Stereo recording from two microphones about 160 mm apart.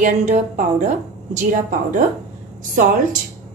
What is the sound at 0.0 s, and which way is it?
A woman's voice, 50° right (ahead or behind).